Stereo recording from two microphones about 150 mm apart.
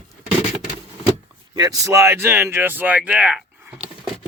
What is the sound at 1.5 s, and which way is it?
Speech, 25° right (ahead or behind).